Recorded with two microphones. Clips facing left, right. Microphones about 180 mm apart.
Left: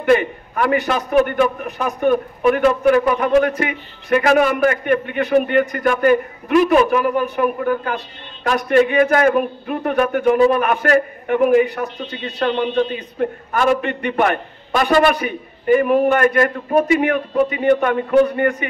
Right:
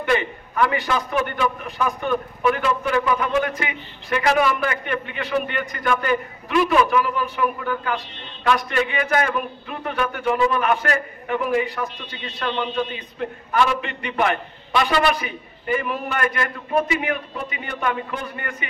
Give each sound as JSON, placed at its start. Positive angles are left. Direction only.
{"t": 0.0, "sound": "a man's voice", "side_deg": 45}